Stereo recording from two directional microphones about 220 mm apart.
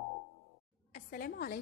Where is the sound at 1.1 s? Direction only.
45° left (ahead or behind).